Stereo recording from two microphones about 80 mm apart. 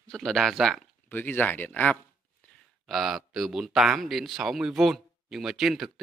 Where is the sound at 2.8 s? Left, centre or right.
Centre.